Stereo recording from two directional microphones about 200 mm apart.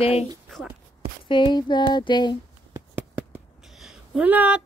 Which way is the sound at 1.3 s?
20° left (ahead or behind).